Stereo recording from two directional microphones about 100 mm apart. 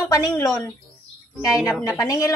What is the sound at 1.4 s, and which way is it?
Speech, 35° left (ahead or behind).